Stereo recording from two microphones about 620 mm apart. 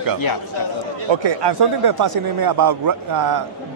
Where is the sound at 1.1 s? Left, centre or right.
Right.